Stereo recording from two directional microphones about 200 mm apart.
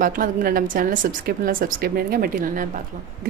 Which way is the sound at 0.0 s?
45° right (ahead or behind).